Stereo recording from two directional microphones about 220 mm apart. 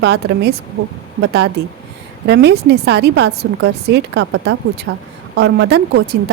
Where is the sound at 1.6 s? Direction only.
45° right (ahead or behind).